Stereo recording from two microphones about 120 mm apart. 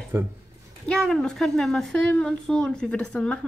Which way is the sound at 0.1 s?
20° right (ahead or behind).